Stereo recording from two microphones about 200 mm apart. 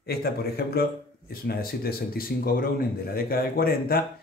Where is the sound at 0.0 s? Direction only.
50° left (ahead or behind).